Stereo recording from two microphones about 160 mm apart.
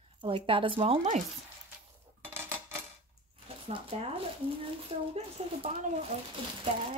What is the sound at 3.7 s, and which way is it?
Speech, 35° right (ahead or behind).